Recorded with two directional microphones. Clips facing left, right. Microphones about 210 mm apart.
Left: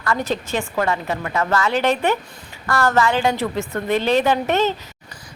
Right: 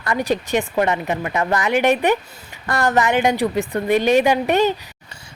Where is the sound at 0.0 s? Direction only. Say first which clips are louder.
Right 2 dB; 15° right (ahead or behind).